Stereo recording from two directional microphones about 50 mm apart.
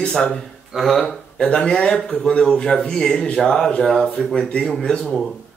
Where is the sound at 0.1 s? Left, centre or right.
Centre.